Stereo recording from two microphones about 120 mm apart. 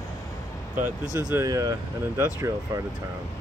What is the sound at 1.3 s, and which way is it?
Speech, 25° right (ahead or behind).